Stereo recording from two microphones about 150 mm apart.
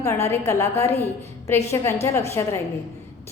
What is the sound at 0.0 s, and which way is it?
A woman's voice, 20° left (ahead or behind).